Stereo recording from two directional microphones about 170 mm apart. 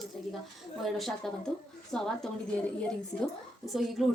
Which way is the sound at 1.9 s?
5° left (ahead or behind).